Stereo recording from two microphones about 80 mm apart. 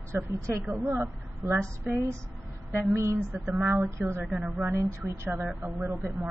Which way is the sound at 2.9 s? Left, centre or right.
Right.